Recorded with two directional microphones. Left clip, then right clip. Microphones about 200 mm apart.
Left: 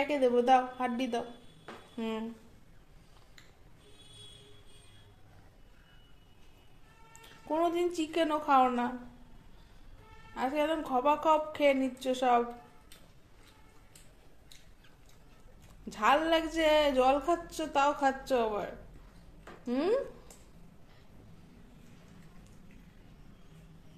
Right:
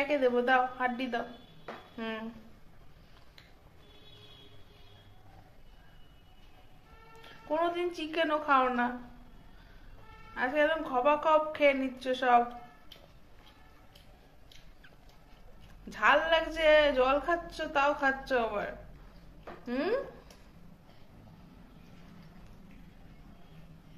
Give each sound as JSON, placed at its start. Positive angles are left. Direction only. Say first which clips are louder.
{"t": 0.0, "sound": "a man's voice", "louder": "even", "side_deg": 35}
{"t": 7.2, "sound": "a man's voice", "louder": "even", "side_deg": 35}
{"t": 10.3, "sound": "a man's voice", "louder": "right 3 dB", "side_deg": 30}
{"t": 15.9, "sound": "a man's voice", "louder": "right 1 dB", "side_deg": 35}